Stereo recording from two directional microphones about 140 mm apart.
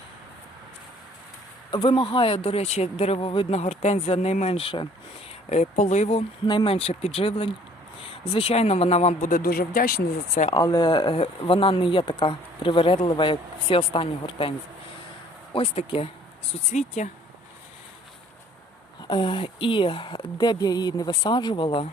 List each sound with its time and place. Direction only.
1.7 s speech: 35° left (ahead or behind)
5.5 s speech: 55° left (ahead or behind)
6.4 s speech: 35° left (ahead or behind)
6.7 s speech: 45° left (ahead or behind)
9.3 s speech: 90° left
10.5 s speech: 30° left (ahead or behind)
15.5 s speech: 45° left (ahead or behind)
16.7 s speech: 55° left (ahead or behind)
19.0 s speech: 35° left (ahead or behind)